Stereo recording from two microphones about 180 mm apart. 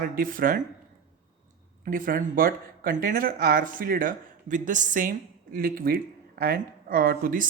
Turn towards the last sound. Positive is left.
turn(degrees=-50)  # may be behind; listen again after turning